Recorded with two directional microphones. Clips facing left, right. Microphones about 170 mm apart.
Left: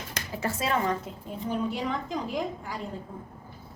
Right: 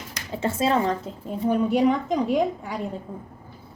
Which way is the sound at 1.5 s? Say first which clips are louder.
Right 10 dB; 65° right (ahead or behind).